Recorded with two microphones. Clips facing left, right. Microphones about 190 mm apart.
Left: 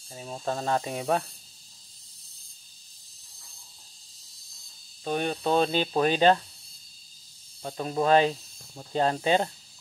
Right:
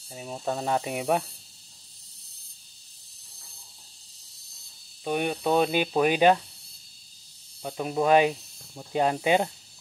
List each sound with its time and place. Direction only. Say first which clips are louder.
0.1 s speech: right 1 dB; 15° right (ahead or behind)
5.0 s speech: right 1 dB; 15° right (ahead or behind)
7.6 s speech: right 1 dB; 10° right (ahead or behind)